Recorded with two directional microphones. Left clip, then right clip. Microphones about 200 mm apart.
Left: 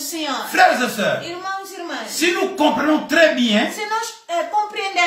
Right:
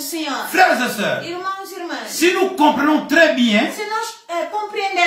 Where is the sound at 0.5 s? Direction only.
Centre (ahead or behind).